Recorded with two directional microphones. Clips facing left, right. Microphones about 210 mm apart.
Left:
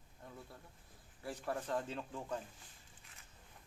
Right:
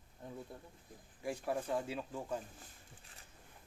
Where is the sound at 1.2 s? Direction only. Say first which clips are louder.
Right 3 dB; 10° right (ahead or behind).